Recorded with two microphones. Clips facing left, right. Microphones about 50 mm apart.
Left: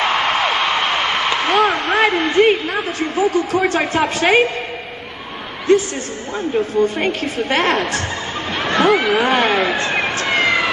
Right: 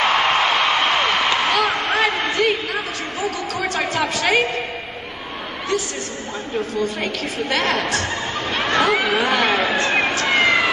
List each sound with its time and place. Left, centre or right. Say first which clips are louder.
0.0 s a sound: even; centre
2.3 s a man's voice: left 6 dB; left
5.7 s a woman's voice: left 10 dB; left
8.5 s speech: left 3 dB; centre
9.2 s a man's voice: left 3 dB; left
9.5 s speech: left 2 dB; centre
10.2 s police car: left 1 dB; centre